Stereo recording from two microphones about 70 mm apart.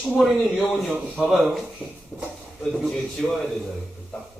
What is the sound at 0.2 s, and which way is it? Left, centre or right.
Speech, centre.